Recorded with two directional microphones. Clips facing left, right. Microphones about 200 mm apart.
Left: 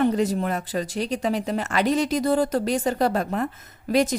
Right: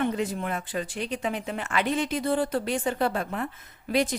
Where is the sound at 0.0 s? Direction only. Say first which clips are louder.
Left 6 dB; 40° left (ahead or behind).